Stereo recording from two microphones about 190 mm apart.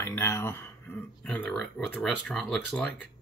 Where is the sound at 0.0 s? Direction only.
15° left (ahead or behind).